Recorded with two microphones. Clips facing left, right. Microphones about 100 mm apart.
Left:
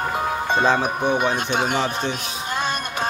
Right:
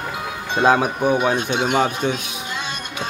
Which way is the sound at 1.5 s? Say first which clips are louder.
Right 1 dB; 45° left (ahead or behind).